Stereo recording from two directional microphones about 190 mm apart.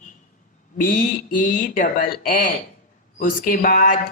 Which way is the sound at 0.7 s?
45° left (ahead or behind).